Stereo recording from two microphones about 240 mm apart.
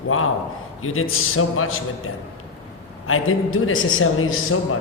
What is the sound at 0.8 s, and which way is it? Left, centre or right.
A man's voice, left.